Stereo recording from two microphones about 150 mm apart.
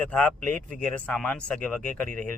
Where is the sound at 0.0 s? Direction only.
10° left (ahead or behind).